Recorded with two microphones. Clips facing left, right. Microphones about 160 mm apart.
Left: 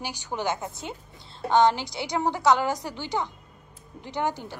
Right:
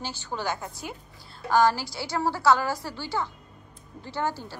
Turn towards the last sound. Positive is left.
turn(degrees=15)  # may be behind; listen again after turning